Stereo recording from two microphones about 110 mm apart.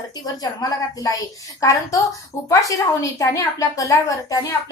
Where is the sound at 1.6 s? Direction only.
30° left (ahead or behind).